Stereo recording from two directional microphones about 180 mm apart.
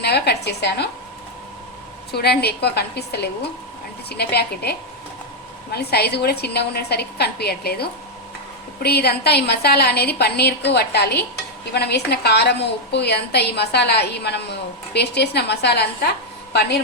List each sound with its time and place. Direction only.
0.0 s a woman's voice: 65° left (ahead or behind)
2.1 s a woman's voice: 65° left (ahead or behind)